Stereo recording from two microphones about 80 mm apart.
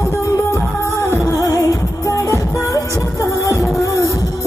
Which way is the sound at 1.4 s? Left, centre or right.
Left.